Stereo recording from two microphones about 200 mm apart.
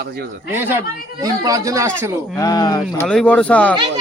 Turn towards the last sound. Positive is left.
turn(degrees=5)  # may be behind; listen again after turning